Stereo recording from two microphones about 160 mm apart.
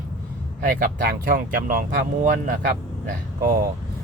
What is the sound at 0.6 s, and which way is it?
Speech, 55° right (ahead or behind).